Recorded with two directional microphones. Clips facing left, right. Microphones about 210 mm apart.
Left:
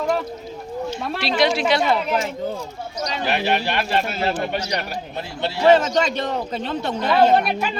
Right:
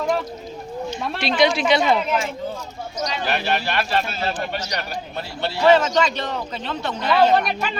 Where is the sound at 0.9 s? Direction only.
5° left (ahead or behind).